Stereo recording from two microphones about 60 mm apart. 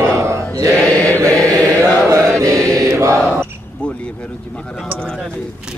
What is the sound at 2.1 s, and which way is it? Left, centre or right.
Chant, right.